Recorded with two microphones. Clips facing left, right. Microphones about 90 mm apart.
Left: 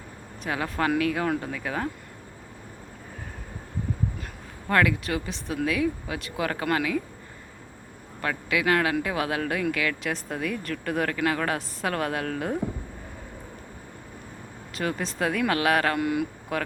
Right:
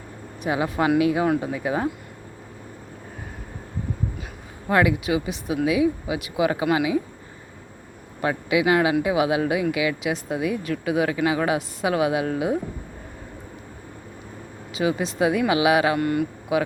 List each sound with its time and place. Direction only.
0.4 s speech: 15° right (ahead or behind)
4.7 s speech: 15° right (ahead or behind)
8.2 s speech: 20° right (ahead or behind)
14.7 s speech: 5° right (ahead or behind)
16.0 s speech: centre (ahead or behind)
16.5 s speech: 10° right (ahead or behind)